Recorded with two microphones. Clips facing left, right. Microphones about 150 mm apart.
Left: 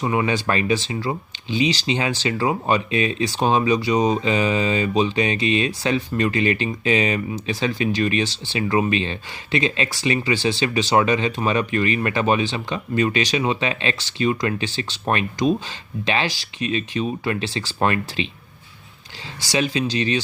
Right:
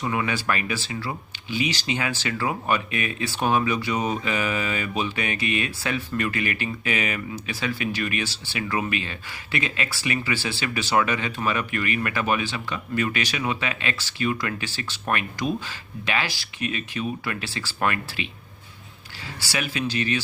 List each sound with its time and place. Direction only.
0.0 s speech: 25° left (ahead or behind)
19.5 s speech: 20° left (ahead or behind)